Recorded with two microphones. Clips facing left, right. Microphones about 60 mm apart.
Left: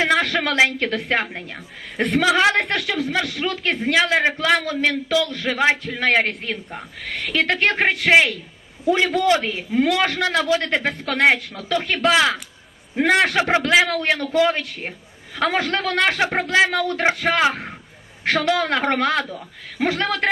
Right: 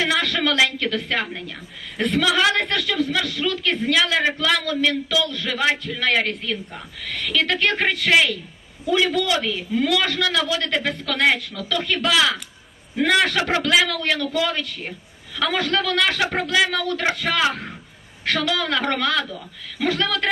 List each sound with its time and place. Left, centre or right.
0.0 s a man's voice: left
4.2 s a man's voice: left
4.6 s a man's voice: left
18.3 s a man's voice: left